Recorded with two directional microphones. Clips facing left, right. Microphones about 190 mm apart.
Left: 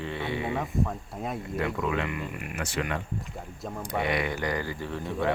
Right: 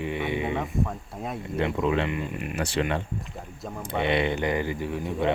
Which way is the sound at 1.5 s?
20° right (ahead or behind).